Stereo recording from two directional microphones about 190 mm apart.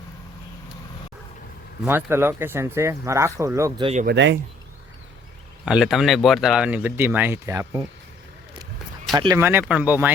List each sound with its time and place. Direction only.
1.8 s speech: 10° right (ahead or behind)
4.0 s speech: 65° right (ahead or behind)
5.6 s speech: 5° right (ahead or behind)
9.1 s speech: 20° right (ahead or behind)